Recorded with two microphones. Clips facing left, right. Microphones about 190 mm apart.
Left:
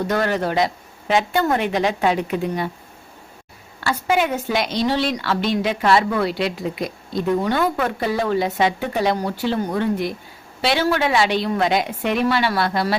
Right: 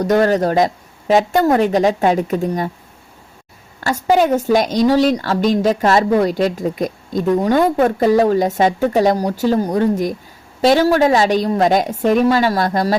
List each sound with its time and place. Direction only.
0.2 s speech: 40° right (ahead or behind)
3.8 s a woman's voice: 45° right (ahead or behind)